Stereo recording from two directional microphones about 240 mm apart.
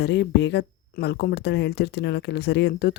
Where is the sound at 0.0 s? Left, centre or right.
Left.